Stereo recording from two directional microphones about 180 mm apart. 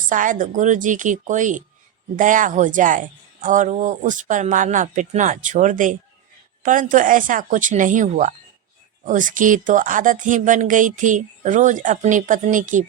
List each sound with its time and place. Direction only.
0.1 s speech: 45° right (ahead or behind)